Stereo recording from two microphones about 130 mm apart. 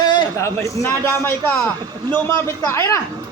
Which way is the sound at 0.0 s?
35° left (ahead or behind).